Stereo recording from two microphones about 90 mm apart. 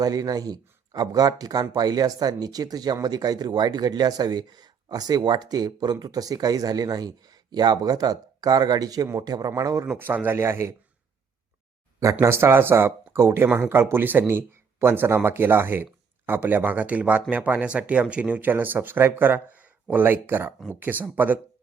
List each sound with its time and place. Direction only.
0.0 s speech: 45° right (ahead or behind)
12.2 s speech: 30° right (ahead or behind)